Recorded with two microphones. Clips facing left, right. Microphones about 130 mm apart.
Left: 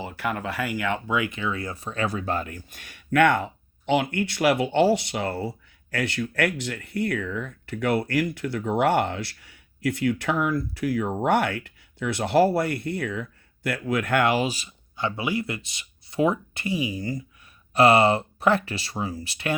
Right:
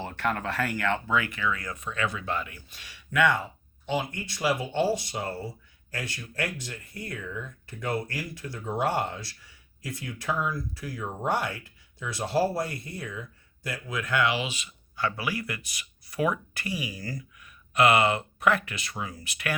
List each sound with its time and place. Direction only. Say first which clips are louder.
0.0 s speech: left 1 dB; 10° left (ahead or behind); by 14.7 s 40° left (ahead or behind)
14.9 s speech: left 4 dB; 20° left (ahead or behind)